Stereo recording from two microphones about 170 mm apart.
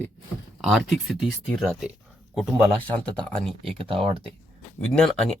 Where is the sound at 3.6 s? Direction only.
35° right (ahead or behind).